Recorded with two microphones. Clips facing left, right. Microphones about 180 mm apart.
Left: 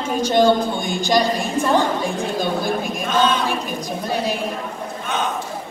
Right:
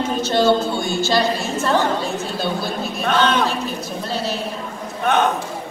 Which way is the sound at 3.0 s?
65° right (ahead or behind).